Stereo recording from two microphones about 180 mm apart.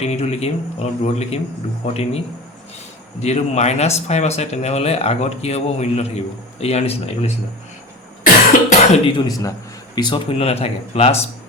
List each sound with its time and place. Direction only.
0.0 s speech: 35° left (ahead or behind)
8.7 s speech: 40° left (ahead or behind)
9.2 s speech: 20° left (ahead or behind); by 11.3 s 35° left (ahead or behind)